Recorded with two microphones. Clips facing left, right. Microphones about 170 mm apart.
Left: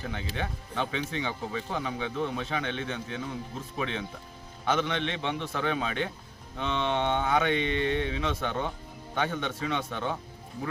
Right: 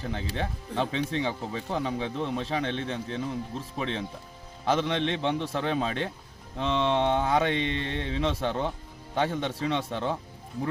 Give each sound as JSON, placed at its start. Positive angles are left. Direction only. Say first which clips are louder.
{"t": 0.0, "sound": "speech", "louder": "right 2 dB", "side_deg": -30}